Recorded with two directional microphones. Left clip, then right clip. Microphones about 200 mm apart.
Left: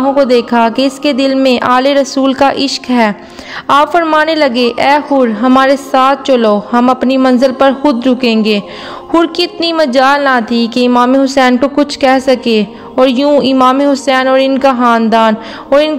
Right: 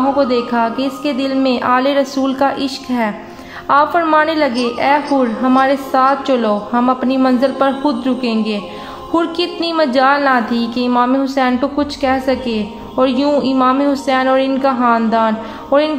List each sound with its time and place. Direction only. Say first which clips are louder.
0.2 s a woman's voice: left 6 dB; 45° left (ahead or behind)